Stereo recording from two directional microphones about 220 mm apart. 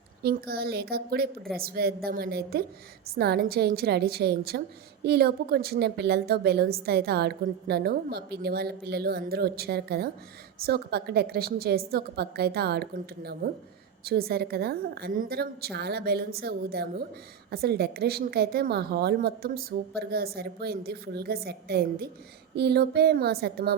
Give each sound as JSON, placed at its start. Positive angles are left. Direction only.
{"t": 0.2, "sound": "a woman's voice", "side_deg": -45}